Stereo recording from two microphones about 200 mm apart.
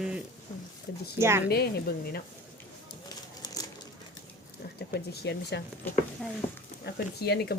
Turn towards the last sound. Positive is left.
turn(degrees=55)  # may be behind; listen again after turning